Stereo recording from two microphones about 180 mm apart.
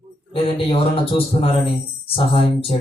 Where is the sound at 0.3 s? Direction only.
30° left (ahead or behind).